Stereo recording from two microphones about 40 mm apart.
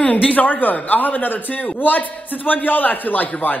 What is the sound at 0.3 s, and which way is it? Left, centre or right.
A man's voice, left.